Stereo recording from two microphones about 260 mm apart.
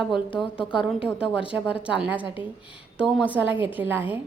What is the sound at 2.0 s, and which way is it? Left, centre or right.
A woman's voice, centre.